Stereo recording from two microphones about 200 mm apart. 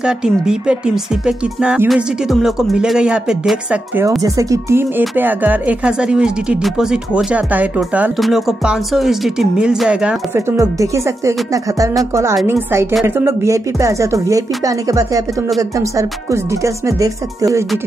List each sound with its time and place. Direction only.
0.0 s speech: 5° right (ahead or behind)